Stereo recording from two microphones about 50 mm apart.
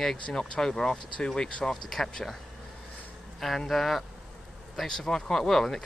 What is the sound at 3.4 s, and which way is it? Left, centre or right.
Speech, centre.